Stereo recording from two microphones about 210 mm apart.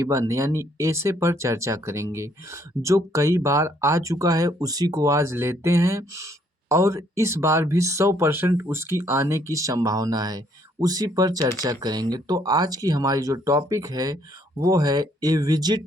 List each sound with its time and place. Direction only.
0.0 s speech: 15° right (ahead or behind)